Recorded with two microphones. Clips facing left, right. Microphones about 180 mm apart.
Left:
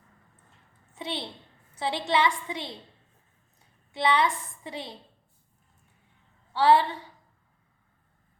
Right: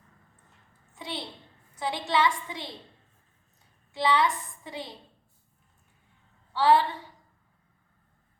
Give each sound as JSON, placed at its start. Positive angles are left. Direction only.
{"t": 0.9, "sound": "a woman's voice", "side_deg": 25}
{"t": 3.9, "sound": "a woman's voice", "side_deg": 20}
{"t": 6.5, "sound": "a woman's voice", "side_deg": 20}